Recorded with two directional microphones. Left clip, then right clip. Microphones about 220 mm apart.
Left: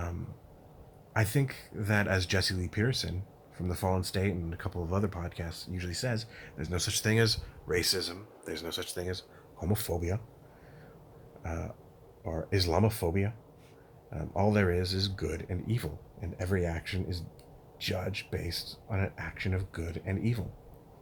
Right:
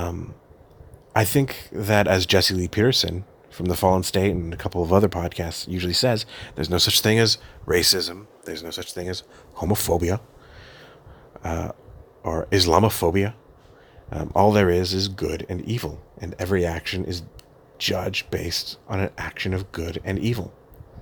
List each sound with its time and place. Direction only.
1.1 s speech: 40° right (ahead or behind)
8.4 s speech: 25° right (ahead or behind)
11.4 s speech: 40° right (ahead or behind)